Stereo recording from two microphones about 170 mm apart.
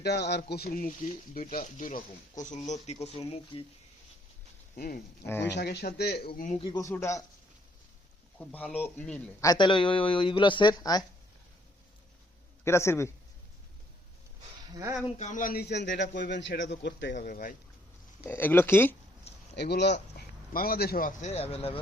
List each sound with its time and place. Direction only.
0.0 s a man's voice: 75° left (ahead or behind); by 3.7 s 35° left (ahead or behind)
4.8 s a man's voice: 60° left (ahead or behind)
5.2 s speech: 15° left (ahead or behind)
5.5 s a man's voice: 75° left (ahead or behind); by 6.6 s 50° left (ahead or behind)
6.6 s speech: 20° left (ahead or behind)
8.4 s speech: 10° left (ahead or behind)
9.4 s speech: 25° left (ahead or behind)
12.6 s speech: 15° left (ahead or behind)
14.7 s speech: 20° right (ahead or behind)
15.2 s a man's voice: 50° left (ahead or behind); by 17.2 s 90° left
17.2 s speech: 50° left (ahead or behind)
18.3 s speech: 10° left (ahead or behind)
19.5 s a man's voice: 80° left; by 21.8 s 35° left (ahead or behind)